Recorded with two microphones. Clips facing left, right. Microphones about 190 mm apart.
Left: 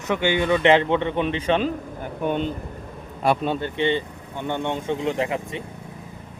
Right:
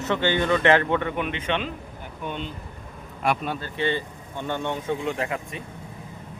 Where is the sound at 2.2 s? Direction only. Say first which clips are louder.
Left 8 dB; 50° left (ahead or behind).